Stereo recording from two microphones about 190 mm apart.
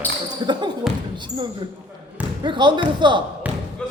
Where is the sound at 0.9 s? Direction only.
Centre (ahead or behind).